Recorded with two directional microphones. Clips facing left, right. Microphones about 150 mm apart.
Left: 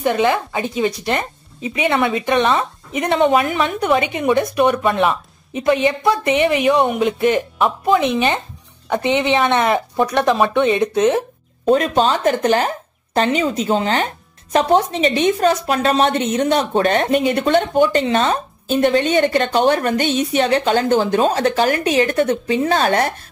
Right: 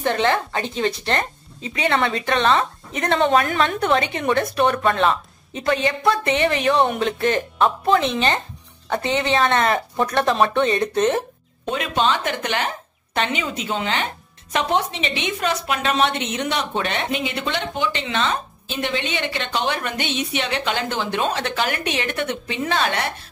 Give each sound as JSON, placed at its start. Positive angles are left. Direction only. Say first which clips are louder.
{"t": 0.0, "sound": "a woman's voice", "louder": "left 3 dB", "side_deg": 10}
{"t": 11.6, "sound": "a woman's voice", "louder": "left 7 dB", "side_deg": 40}